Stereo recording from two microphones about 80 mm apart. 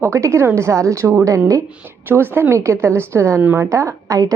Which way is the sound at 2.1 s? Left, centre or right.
Right.